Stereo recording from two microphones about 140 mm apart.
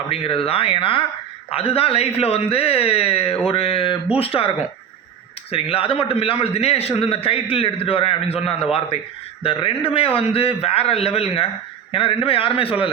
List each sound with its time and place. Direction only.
0.1 s a man's voice: 45° left (ahead or behind)